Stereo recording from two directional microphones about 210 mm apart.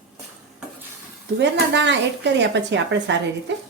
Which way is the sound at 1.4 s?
60° right (ahead or behind).